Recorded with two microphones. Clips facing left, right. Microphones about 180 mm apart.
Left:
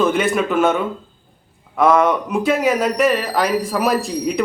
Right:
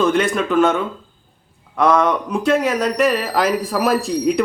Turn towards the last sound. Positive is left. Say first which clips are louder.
# right 2 dB
turn(degrees=0)  # may be behind; listen again after turning